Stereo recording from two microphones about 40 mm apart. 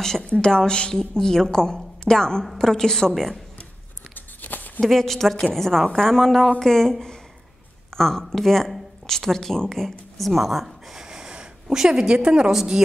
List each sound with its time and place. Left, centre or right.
0.2 s a woman's voice: left; by 3.3 s centre
4.1 s tearing: left
4.8 s a woman's voice: centre
11.1 s a sound: centre
11.7 s a woman's voice: centre